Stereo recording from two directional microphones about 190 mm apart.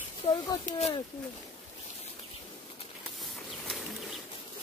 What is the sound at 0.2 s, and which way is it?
Speech, 25° left (ahead or behind).